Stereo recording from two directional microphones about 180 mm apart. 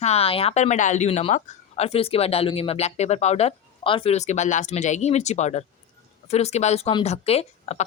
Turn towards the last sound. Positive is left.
turn(degrees=35)  # may be behind; listen again after turning